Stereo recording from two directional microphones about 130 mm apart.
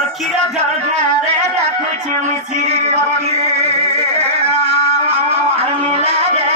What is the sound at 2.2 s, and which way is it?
Music, 60° right (ahead or behind).